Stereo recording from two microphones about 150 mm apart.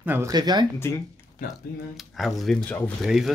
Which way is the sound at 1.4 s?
65° left (ahead or behind).